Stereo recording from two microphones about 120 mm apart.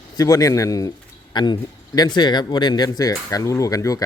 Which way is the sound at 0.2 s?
30° left (ahead or behind).